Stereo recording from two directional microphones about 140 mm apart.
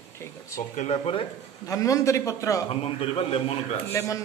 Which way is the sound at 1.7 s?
25° left (ahead or behind).